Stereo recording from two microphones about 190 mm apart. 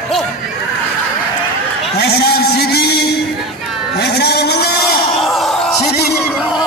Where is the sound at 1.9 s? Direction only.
60° left (ahead or behind).